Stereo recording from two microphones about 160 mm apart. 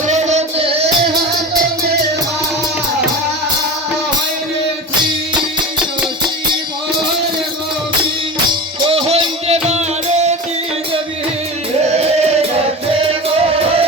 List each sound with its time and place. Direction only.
0.1 s music: 45° right (ahead or behind)
8.9 s music: 35° right (ahead or behind)
11.8 s music: 45° right (ahead or behind)